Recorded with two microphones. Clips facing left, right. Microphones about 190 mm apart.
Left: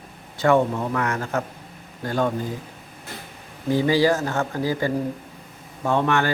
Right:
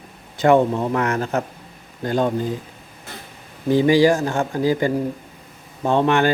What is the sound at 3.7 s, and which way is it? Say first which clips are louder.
Speech: right 4 dB; 15° right (ahead or behind).